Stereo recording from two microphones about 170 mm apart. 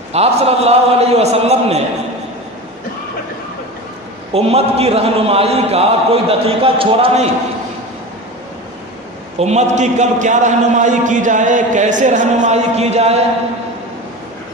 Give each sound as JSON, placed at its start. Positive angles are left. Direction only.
{"t": 0.1, "sound": "a man's voice", "side_deg": -35}
{"t": 4.3, "sound": "a man's voice", "side_deg": -35}
{"t": 9.4, "sound": "a man's voice", "side_deg": -40}